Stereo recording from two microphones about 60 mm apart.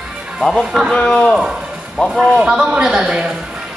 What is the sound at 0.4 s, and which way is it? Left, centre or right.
Speech, centre.